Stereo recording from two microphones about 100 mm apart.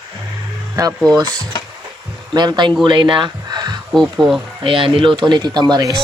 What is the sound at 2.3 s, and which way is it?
Speech, 45° right (ahead or behind).